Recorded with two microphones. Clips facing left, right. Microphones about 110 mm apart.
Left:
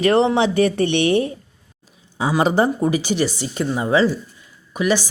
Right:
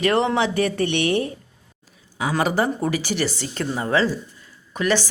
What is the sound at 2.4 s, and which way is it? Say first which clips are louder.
A woman's voice: left 4 dB; 25° left (ahead or behind).